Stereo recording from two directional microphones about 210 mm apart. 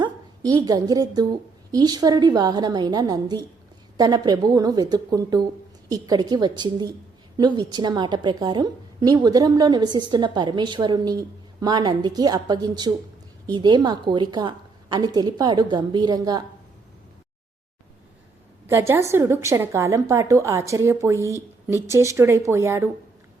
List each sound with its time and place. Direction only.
0.0 s a woman's voice: 20° right (ahead or behind)
18.7 s a woman's voice: 10° right (ahead or behind)